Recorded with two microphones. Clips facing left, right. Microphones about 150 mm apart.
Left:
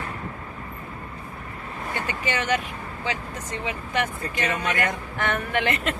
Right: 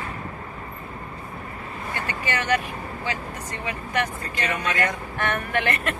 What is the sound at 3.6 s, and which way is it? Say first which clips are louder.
Speech: even; 20° left (ahead or behind).